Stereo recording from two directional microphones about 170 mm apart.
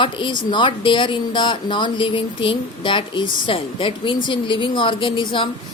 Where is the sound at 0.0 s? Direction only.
25° left (ahead or behind).